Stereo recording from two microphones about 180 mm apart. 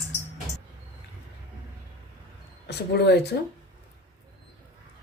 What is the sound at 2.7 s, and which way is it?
Speech, 65° left (ahead or behind).